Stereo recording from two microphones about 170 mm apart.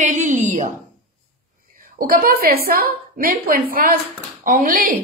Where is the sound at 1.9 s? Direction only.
55° right (ahead or behind).